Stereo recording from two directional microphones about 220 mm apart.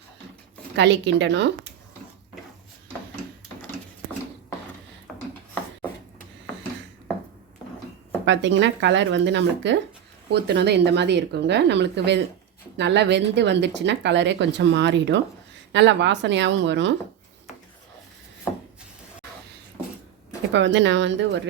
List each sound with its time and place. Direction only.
0.8 s speech: 55° right (ahead or behind)
5.1 s a sound: centre (ahead or behind)
8.2 s speech: 55° right (ahead or behind)
20.5 s speech: 55° right (ahead or behind)